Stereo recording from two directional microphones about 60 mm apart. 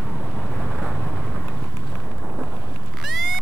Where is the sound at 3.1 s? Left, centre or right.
Centre.